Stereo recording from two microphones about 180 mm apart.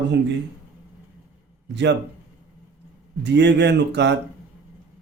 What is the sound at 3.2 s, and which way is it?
Speech, 75° right (ahead or behind).